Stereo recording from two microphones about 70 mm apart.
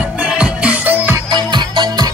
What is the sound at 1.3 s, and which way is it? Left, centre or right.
Music, right.